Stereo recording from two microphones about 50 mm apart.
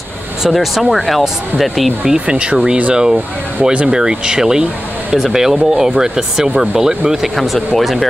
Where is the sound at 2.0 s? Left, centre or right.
Centre.